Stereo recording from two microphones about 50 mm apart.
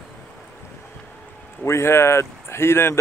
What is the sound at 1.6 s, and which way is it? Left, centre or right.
Speech, left.